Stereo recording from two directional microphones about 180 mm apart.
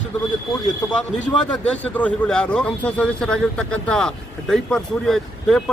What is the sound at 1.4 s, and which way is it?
Speech, 5° left (ahead or behind).